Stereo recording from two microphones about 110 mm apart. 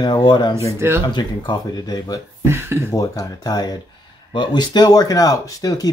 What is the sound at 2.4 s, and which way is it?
Speech, 20° right (ahead or behind).